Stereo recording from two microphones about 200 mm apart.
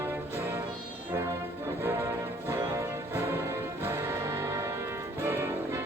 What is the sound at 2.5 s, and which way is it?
Music, 15° right (ahead or behind).